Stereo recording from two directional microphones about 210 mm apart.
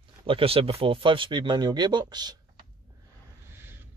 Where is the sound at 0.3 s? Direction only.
25° right (ahead or behind).